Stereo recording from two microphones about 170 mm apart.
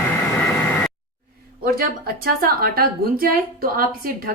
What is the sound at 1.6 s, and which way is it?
A woman's voice, 60° right (ahead or behind).